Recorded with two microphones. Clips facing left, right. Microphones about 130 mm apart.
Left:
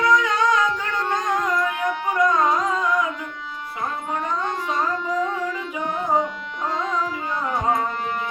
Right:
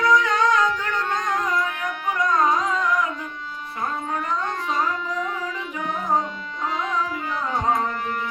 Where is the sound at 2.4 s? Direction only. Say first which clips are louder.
Even; centre (ahead or behind).